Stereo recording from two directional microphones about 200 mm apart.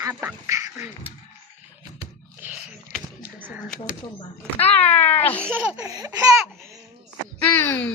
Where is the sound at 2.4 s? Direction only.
5° right (ahead or behind).